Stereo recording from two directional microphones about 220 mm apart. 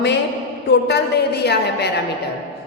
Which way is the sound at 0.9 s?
50° left (ahead or behind).